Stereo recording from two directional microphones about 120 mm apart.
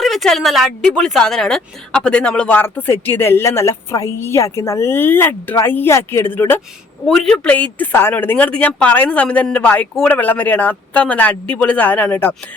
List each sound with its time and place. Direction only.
0.0 s speech: centre (ahead or behind); by 6.6 s 20° left (ahead or behind)
7.0 s a woman's voice: 5° left (ahead or behind)